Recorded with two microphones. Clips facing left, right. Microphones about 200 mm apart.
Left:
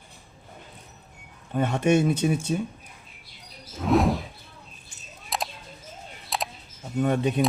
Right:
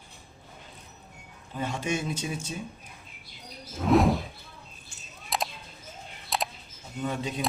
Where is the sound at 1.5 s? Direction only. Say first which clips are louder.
Left 9 dB; 60° left (ahead or behind).